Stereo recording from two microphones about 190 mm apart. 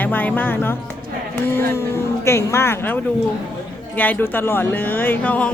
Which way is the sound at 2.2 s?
15° left (ahead or behind).